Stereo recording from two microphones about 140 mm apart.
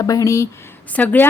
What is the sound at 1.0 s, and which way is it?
Speech, 10° left (ahead or behind).